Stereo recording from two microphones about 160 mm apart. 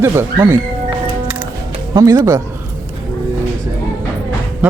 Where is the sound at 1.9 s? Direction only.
20° right (ahead or behind).